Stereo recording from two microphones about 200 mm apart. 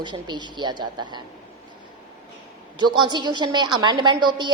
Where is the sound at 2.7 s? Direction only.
25° right (ahead or behind).